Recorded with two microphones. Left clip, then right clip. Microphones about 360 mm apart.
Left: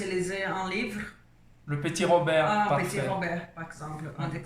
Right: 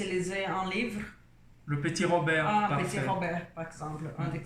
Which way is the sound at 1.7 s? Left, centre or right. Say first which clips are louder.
Left 4 dB; centre.